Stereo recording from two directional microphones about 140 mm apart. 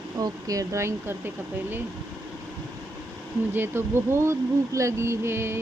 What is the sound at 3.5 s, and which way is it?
Speech, 15° right (ahead or behind).